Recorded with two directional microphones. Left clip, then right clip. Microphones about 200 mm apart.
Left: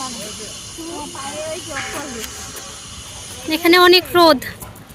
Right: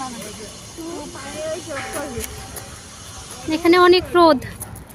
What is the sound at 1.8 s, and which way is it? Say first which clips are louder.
Speech: left 1 dB; 55° right (ahead or behind).